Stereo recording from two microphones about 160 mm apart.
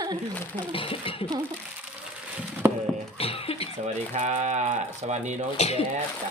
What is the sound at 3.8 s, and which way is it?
Speech, 45° right (ahead or behind).